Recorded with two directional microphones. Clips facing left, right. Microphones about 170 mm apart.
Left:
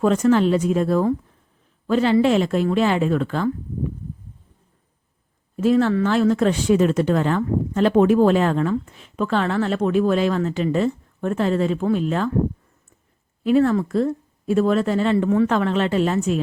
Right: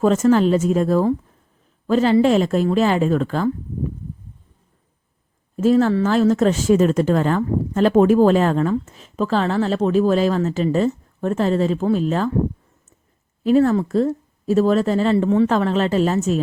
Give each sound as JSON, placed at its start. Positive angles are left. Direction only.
{"t": 0.0, "sound": "a woman's voice", "side_deg": -40}
{"t": 5.5, "sound": "a woman's voice", "side_deg": -40}
{"t": 13.4, "sound": "a woman's voice", "side_deg": -40}